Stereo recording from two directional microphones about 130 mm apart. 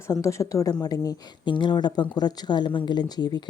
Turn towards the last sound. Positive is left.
turn(degrees=35)  # may be behind; listen again after turning